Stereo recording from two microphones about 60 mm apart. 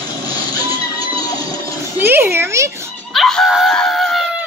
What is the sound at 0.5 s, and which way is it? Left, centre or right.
Music, left.